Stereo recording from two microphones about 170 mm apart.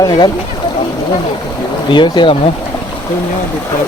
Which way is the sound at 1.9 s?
25° left (ahead or behind).